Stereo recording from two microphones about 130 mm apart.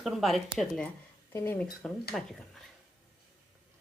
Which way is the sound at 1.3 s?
15° left (ahead or behind).